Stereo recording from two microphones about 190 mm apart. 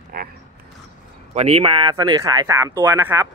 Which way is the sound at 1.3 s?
35° right (ahead or behind).